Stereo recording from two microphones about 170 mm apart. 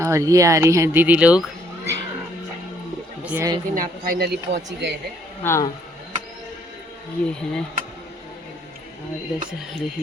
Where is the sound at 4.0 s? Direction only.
65° right (ahead or behind).